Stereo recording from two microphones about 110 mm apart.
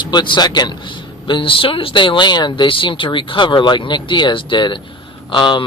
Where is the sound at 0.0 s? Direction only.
45° left (ahead or behind).